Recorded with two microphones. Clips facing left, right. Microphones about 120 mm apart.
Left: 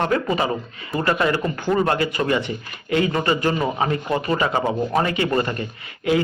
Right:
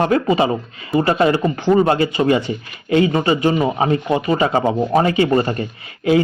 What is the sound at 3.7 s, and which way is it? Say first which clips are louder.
Speech: right 5 dB; 25° right (ahead or behind).